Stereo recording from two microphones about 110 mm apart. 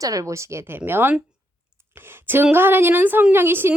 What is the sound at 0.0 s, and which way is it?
Speech, 30° right (ahead or behind).